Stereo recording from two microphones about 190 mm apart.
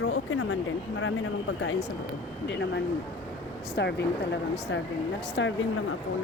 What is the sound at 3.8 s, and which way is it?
Speech, 60° left (ahead or behind).